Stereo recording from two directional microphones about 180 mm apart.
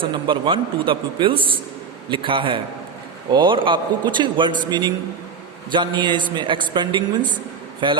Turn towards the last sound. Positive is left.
turn(degrees=-25)  # may be behind; listen again after turning